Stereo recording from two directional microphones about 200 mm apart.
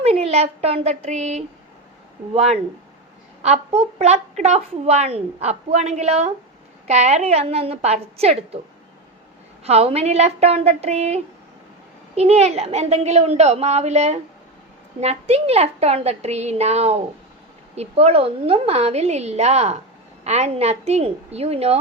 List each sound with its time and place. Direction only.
0.0 s a woman's voice: 30° right (ahead or behind)
9.6 s a woman's voice: 30° right (ahead or behind)